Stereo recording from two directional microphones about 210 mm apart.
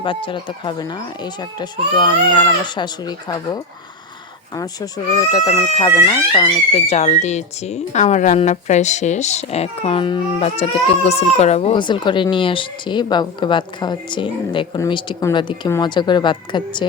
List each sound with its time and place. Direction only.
0.0 s speech: 25° left (ahead or behind)